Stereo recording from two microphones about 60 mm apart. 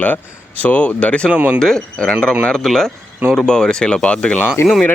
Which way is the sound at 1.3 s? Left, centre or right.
Right.